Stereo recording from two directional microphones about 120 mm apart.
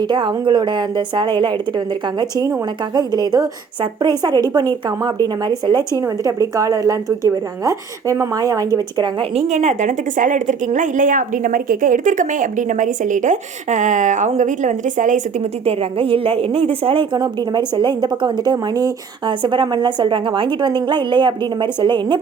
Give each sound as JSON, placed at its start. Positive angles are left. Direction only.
{"t": 0.1, "sound": "a woman's voice", "side_deg": -40}
{"t": 9.3, "sound": "a woman's voice", "side_deg": -70}
{"t": 15.6, "sound": "a woman's voice", "side_deg": -50}
{"t": 17.2, "sound": "a woman's voice", "side_deg": -40}